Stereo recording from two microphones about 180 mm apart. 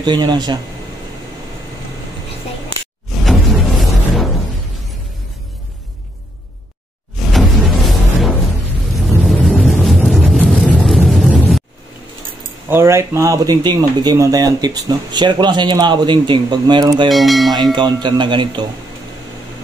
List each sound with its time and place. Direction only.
0.0 s speech: 25° right (ahead or behind)
3.1 s music: centre (ahead or behind)
7.2 s music: centre (ahead or behind)
8.9 s vehicle: centre (ahead or behind)
12.6 s speech: 15° right (ahead or behind)
17.1 s speech: centre (ahead or behind)
17.7 s speech: 25° right (ahead or behind)